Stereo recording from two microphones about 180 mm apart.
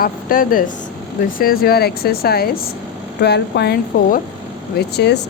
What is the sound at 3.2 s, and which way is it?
A woman's voice, 70° left (ahead or behind).